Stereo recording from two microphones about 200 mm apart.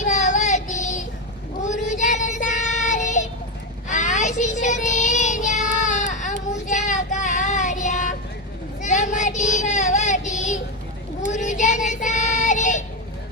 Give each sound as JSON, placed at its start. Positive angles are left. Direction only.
{"t": 0.0, "sound": "child singing", "side_deg": 40}